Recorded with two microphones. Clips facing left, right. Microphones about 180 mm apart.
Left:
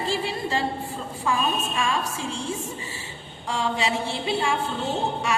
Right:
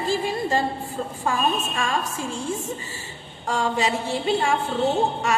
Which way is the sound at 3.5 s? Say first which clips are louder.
Right 2 dB; 45° right (ahead or behind).